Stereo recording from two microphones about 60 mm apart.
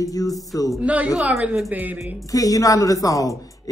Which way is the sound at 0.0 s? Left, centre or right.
Left.